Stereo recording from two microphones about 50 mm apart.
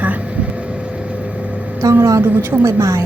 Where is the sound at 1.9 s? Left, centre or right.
Right.